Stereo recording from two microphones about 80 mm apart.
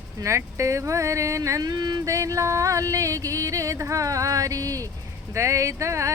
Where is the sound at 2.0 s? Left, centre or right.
Right.